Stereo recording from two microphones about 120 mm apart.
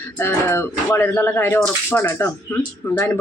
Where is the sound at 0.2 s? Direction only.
20° left (ahead or behind).